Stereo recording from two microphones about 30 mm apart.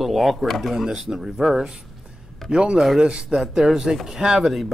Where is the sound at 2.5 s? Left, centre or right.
Right.